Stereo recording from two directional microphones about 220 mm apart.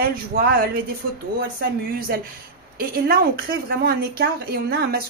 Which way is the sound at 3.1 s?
45° right (ahead or behind).